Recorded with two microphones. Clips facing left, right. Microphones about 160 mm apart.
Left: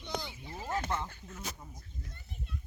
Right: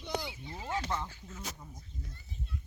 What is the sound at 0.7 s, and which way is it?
Speech, 55° left (ahead or behind).